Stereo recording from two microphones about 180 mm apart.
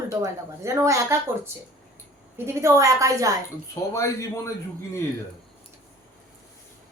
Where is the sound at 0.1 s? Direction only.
20° right (ahead or behind).